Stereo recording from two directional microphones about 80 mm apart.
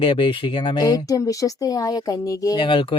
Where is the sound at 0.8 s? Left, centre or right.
Left.